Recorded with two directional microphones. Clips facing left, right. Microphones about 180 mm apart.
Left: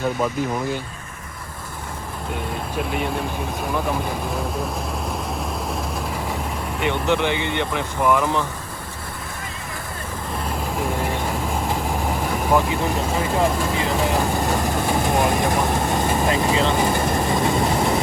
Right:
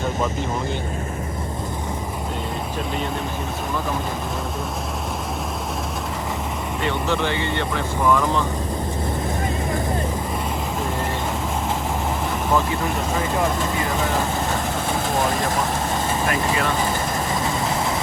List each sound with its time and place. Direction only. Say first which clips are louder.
6.8 s speech: left 3 dB; 15° left (ahead or behind)
15.0 s speech: left 2 dB; 20° left (ahead or behind)